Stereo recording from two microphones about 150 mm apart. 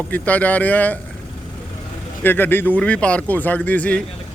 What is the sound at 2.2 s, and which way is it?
A man's voice, 15° left (ahead or behind).